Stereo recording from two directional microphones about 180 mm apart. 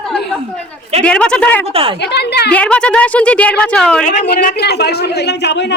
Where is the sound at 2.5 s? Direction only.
5° left (ahead or behind).